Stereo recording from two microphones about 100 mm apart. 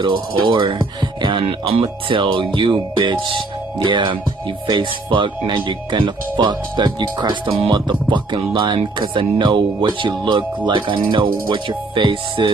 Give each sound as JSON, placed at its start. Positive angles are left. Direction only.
{"t": 0.0, "sound": "music", "side_deg": -55}
{"t": 1.4, "sound": "speech", "side_deg": -75}
{"t": 7.4, "sound": "speech", "side_deg": -60}